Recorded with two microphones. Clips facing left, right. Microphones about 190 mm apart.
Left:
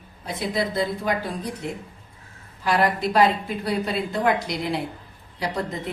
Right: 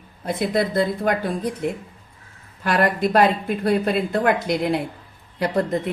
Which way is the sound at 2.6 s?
55° right (ahead or behind).